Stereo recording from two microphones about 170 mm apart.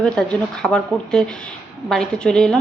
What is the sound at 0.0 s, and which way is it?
A woman's voice, 5° left (ahead or behind).